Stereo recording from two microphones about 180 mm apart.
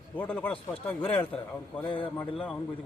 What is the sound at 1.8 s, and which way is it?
Speech, 30° left (ahead or behind).